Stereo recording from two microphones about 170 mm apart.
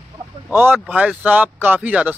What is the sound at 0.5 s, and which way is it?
Speech, 10° right (ahead or behind).